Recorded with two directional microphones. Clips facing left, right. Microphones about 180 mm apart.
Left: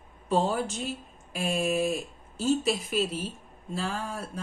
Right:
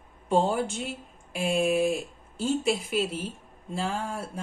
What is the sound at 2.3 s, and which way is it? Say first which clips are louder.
Speech: even; 30° right (ahead or behind).